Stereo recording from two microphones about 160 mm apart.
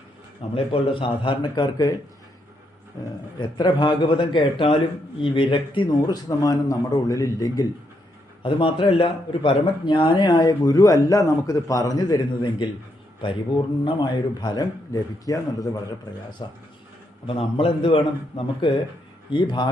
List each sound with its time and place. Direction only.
0.5 s a man's voice: 35° left (ahead or behind)
3.3 s speech: 30° left (ahead or behind)
8.4 s speech: 30° left (ahead or behind)
13.8 s a man's voice: 25° left (ahead or behind)